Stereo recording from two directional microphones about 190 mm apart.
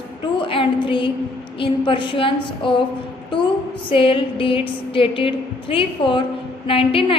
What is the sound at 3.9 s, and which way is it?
A woman's voice, 30° left (ahead or behind).